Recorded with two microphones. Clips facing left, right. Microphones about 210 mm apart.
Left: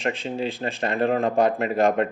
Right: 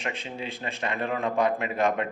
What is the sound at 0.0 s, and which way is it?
Speech, 30° left (ahead or behind).